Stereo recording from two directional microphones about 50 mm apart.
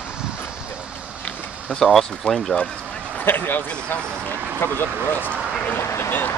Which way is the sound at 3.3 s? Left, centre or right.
Left.